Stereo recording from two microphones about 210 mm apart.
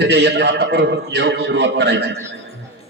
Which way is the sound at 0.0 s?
55° right (ahead or behind).